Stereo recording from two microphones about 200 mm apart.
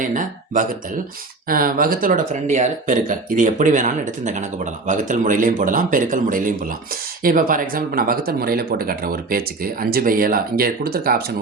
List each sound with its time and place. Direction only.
0.0 s speech: 40° right (ahead or behind)